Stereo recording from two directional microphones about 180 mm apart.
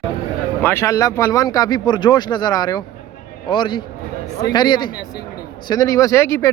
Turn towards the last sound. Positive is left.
turn(degrees=15)  # may be behind; listen again after turning